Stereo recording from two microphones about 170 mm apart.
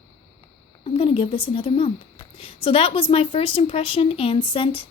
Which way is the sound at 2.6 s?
35° left (ahead or behind).